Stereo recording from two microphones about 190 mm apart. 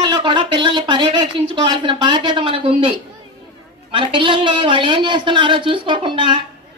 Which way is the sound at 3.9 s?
25° right (ahead or behind).